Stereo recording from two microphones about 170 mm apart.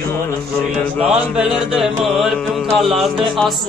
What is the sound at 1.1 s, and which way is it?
Music, 5° right (ahead or behind).